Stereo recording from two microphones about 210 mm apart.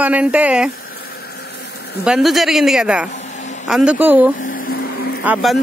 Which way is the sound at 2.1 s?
Centre (ahead or behind).